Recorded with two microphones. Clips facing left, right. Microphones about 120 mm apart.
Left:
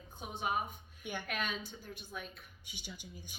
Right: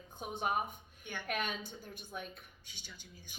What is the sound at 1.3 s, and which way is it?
Speech, 50° right (ahead or behind).